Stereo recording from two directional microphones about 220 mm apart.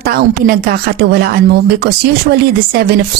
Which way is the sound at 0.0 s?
45° right (ahead or behind).